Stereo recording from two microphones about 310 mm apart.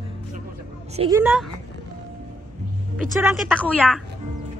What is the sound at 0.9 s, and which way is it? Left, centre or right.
Speech, centre.